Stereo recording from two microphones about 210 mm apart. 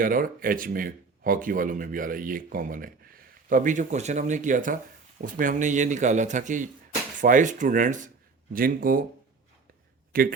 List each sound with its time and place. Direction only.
0.0 s speech: 40° right (ahead or behind)
10.1 s a man's voice: 45° right (ahead or behind)